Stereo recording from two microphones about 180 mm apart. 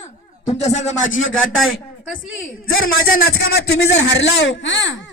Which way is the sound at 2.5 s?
55° left (ahead or behind).